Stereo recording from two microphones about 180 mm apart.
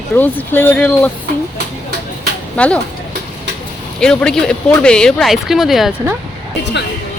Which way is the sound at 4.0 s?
5° left (ahead or behind).